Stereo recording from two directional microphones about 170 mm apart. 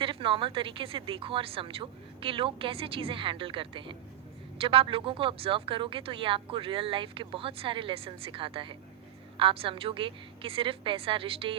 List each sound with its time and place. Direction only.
0.0 s speech: 30° right (ahead or behind)